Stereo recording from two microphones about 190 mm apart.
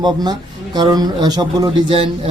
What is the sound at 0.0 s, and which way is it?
Speech, 20° right (ahead or behind).